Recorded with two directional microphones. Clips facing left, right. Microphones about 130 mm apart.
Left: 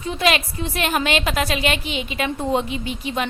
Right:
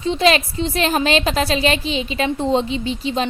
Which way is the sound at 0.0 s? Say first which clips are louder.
Right 4 dB; 30° right (ahead or behind).